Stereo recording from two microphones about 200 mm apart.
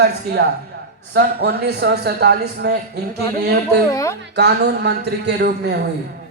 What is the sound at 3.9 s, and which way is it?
Speech, 15° left (ahead or behind).